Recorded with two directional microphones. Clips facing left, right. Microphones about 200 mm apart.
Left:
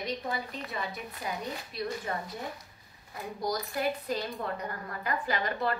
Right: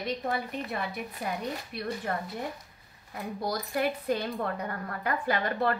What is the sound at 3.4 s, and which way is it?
A woman's voice, 60° right (ahead or behind).